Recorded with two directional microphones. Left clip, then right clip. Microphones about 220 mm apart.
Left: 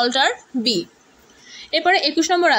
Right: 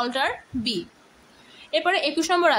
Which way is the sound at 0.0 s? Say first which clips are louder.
Left 7 dB; 15° left (ahead or behind).